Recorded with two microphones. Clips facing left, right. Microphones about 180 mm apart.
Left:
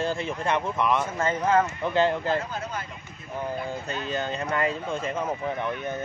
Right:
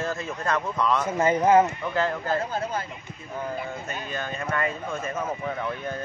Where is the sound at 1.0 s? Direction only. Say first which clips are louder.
Right 4 dB; 20° right (ahead or behind).